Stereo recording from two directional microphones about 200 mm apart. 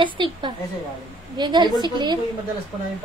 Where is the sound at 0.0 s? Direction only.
25° right (ahead or behind).